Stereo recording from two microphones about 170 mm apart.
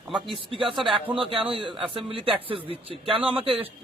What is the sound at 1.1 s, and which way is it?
A man's voice, 30° right (ahead or behind).